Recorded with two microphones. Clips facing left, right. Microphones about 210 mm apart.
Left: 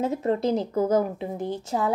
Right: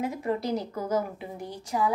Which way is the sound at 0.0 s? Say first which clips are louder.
Left 5 dB; 25° left (ahead or behind).